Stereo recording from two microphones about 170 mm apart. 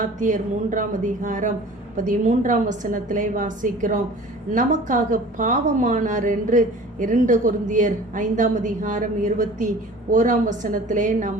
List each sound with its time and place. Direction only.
0.0 s a woman's voice: 50° right (ahead or behind)